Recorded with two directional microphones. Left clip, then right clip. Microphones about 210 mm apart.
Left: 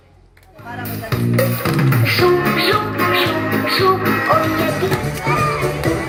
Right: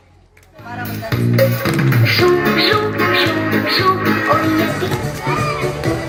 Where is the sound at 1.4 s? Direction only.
35° right (ahead or behind).